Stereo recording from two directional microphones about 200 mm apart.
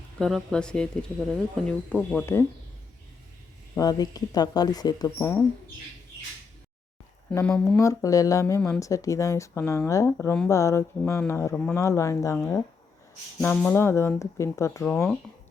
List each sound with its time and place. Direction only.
0.2 s speech: centre (ahead or behind)
3.8 s speech: 20° left (ahead or behind)
7.3 s speech: 5° left (ahead or behind)
7.8 s speech: 15° left (ahead or behind)
13.4 s speech: 5° left (ahead or behind)